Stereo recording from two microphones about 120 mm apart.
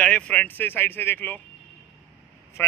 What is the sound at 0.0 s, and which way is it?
A man's voice, 10° left (ahead or behind).